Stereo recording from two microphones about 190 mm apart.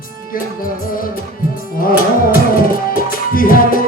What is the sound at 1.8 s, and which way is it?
Music, 50° left (ahead or behind).